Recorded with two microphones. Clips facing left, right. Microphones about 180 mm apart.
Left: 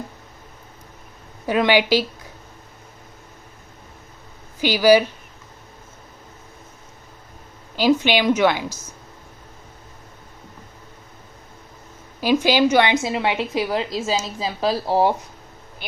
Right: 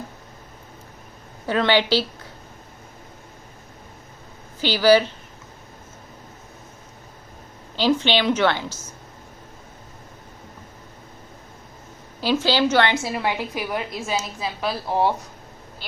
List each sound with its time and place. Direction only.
1.5 s a woman's voice: 10° left (ahead or behind)
4.6 s a woman's voice: 10° left (ahead or behind)
7.8 s a woman's voice: 10° left (ahead or behind)
12.2 s a woman's voice: 15° left (ahead or behind); by 15.0 s 35° left (ahead or behind)
15.8 s a woman's voice: 20° left (ahead or behind)